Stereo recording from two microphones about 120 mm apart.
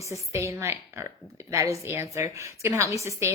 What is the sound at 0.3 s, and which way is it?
Speech, 25° right (ahead or behind).